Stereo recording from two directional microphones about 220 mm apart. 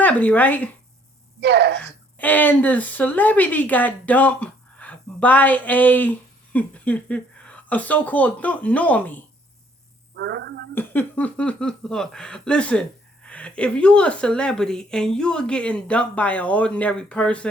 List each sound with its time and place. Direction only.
0.0 s speech: 5° left (ahead or behind)
1.4 s speech: 50° right (ahead or behind)
1.8 s speech: 10° left (ahead or behind)
10.2 s speech: 50° right (ahead or behind)
10.8 s speech: 10° left (ahead or behind)